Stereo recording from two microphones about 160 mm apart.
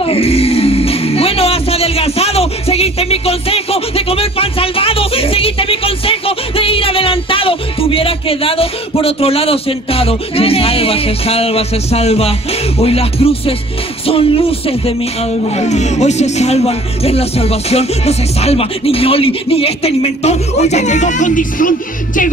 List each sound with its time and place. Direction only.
0.0 s music: 35° left (ahead or behind)
14.0 s speech: 35° left (ahead or behind); by 22.3 s 55° left (ahead or behind)